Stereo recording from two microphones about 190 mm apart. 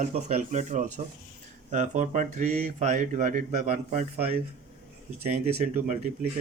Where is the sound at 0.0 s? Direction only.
40° right (ahead or behind).